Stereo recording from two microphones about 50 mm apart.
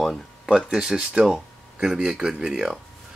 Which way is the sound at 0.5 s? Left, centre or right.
Centre.